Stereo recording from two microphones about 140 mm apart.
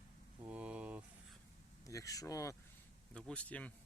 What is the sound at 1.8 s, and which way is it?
Speech, 25° left (ahead or behind).